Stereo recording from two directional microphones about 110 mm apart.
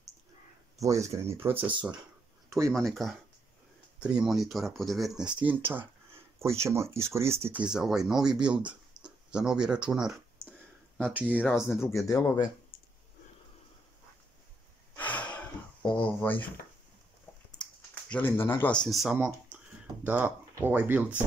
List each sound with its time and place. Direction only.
0.7 s speech: 30° right (ahead or behind)
2.7 s speech: centre (ahead or behind)
4.0 s speech: 10° right (ahead or behind)
7.6 s speech: 5° right (ahead or behind)
12.1 s speech: 30° left (ahead or behind)
15.0 s gasp: 15° left (ahead or behind)
15.9 s speech: 10° left (ahead or behind)
18.1 s speech: 20° left (ahead or behind)
18.7 s speech: 5° left (ahead or behind)
19.1 s speech: 15° right (ahead or behind)